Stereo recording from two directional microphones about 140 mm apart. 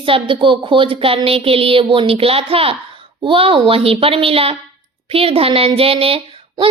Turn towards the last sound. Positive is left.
turn(degrees=-40)  # may be behind; listen again after turning